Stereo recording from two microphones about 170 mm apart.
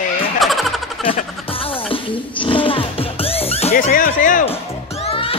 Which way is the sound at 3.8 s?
55° left (ahead or behind).